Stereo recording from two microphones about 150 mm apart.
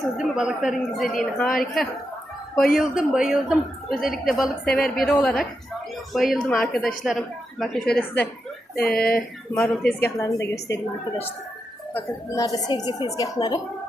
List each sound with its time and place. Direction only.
0.2 s a woman's voice: 5° right (ahead or behind)
9.0 s speech: 90° left
9.5 s a woman's voice: 5° left (ahead or behind)
10.2 s speech: 20° left (ahead or behind)
11.9 s speech: 25° left (ahead or behind)